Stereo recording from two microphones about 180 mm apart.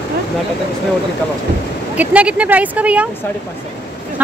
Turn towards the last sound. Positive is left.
turn(degrees=-5)  # may be behind; listen again after turning